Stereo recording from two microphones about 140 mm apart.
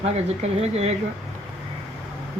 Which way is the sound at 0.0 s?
50° right (ahead or behind).